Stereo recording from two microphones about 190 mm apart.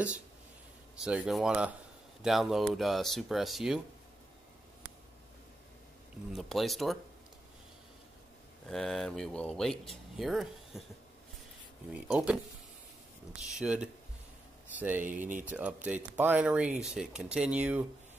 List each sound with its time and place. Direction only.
0.9 s speech: 5° right (ahead or behind)
6.3 s speech: centre (ahead or behind)
8.6 s speech: centre (ahead or behind)
11.9 s speech: 5° right (ahead or behind)
13.4 s speech: 5° right (ahead or behind)
15.0 s speech: 45° right (ahead or behind)
15.4 s speech: 5° right (ahead or behind)